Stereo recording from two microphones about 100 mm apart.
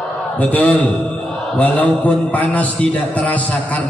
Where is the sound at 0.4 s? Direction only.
15° left (ahead or behind).